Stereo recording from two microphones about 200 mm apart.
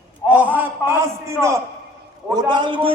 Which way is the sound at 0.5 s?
10° right (ahead or behind).